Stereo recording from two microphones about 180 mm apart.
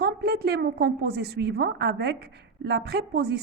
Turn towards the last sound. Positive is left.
turn(degrees=-60)  # may be behind; listen again after turning